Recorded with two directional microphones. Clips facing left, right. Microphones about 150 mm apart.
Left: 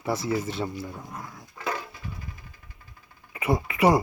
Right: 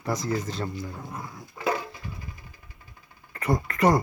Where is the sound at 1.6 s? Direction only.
15° right (ahead or behind).